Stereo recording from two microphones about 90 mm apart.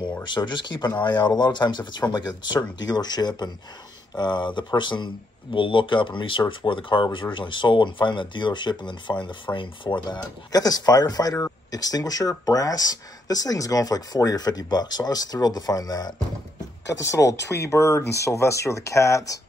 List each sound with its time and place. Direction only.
0.3 s speech: 55° left (ahead or behind); by 19.4 s 40° left (ahead or behind)